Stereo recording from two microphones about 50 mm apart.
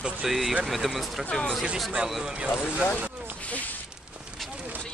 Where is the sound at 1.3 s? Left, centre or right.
Centre.